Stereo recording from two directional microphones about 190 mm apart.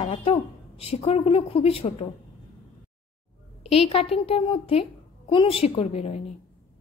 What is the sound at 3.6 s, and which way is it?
A woman's voice, 30° left (ahead or behind).